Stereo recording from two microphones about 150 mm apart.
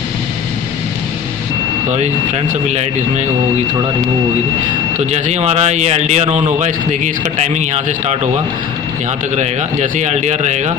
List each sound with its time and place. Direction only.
1.9 s speech: 50° right (ahead or behind)
4.9 s speech: 50° right (ahead or behind)
9.4 s speech: 50° right (ahead or behind)